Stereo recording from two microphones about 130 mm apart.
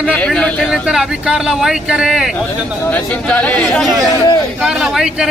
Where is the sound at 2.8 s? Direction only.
10° left (ahead or behind).